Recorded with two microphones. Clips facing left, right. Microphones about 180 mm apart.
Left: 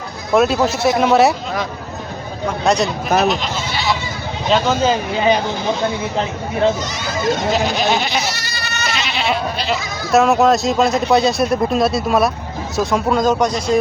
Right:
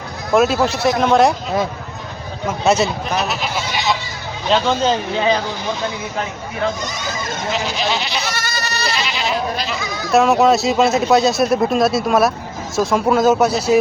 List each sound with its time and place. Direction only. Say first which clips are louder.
0.3 s speech: even; centre (ahead or behind)
2.5 s speech: right 1 dB; 5° right (ahead or behind)
4.4 s speech: left 1 dB; 5° left (ahead or behind)
6.1 s speech: left 4 dB; 25° left (ahead or behind)
7.5 s goat: left 4 dB; 50° left (ahead or behind)
8.2 s goat: right 1 dB; 55° right (ahead or behind); by 8.9 s 35° right (ahead or behind)
9.0 s goat: left 1 dB; 60° left (ahead or behind)
10.1 s speech: even; centre (ahead or behind)